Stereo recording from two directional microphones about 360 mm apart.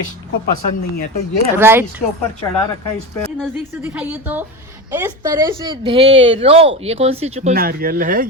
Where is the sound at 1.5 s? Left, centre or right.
Centre.